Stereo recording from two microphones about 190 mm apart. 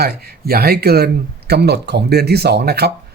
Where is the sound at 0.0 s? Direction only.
55° right (ahead or behind).